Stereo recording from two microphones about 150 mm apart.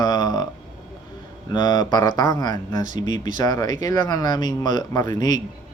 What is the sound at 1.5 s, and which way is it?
Speech, 30° left (ahead or behind).